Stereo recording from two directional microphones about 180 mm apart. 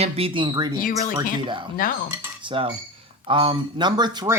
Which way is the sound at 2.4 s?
30° right (ahead or behind).